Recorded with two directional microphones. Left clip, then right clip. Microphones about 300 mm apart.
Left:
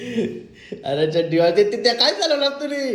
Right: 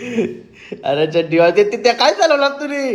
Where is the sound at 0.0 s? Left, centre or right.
Centre.